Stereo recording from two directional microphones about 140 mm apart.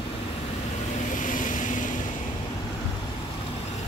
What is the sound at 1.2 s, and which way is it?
Vehicle, 70° left (ahead or behind).